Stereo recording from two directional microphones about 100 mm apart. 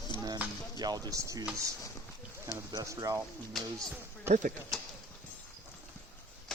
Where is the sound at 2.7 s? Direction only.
35° right (ahead or behind).